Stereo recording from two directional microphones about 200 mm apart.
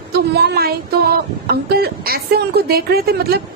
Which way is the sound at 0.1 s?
55° right (ahead or behind).